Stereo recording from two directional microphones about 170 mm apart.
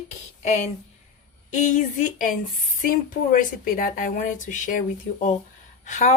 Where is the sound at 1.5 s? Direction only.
45° left (ahead or behind).